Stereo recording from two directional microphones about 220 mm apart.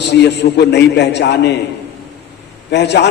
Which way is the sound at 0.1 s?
50° left (ahead or behind).